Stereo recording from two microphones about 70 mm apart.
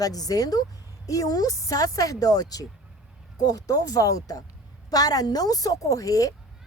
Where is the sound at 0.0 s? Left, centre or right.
Left.